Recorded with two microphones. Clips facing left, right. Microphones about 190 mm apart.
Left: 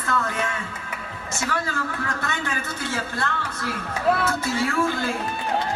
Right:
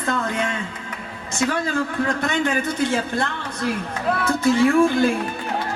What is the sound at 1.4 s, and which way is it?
A man's voice, 20° right (ahead or behind).